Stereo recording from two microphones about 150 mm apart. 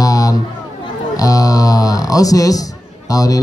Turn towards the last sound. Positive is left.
turn(degrees=25)  # may be behind; listen again after turning